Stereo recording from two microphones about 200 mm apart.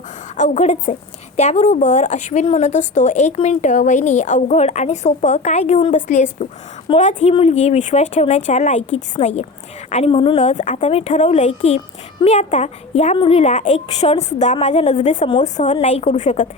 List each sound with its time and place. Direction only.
0.3 s a woman's voice: 40° left (ahead or behind)